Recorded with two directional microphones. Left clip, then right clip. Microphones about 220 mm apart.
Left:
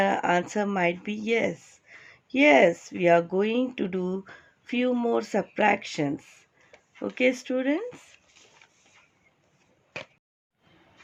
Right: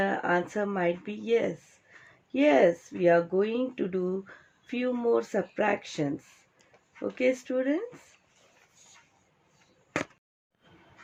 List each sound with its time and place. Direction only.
0.0 s speech: 30° left (ahead or behind)